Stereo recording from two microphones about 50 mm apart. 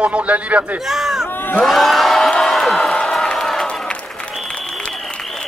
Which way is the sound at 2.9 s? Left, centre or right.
Centre.